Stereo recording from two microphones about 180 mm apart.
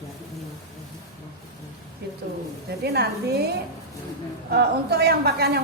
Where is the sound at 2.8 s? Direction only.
65° right (ahead or behind).